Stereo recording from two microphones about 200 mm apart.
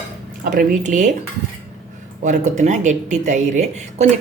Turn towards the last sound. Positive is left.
turn(degrees=-35)  # may be behind; listen again after turning